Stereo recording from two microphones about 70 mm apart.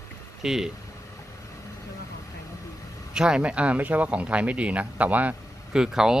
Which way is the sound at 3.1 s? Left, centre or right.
Centre.